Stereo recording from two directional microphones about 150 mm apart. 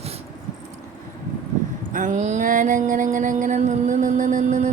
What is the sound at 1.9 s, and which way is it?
A woman's voice, 60° right (ahead or behind).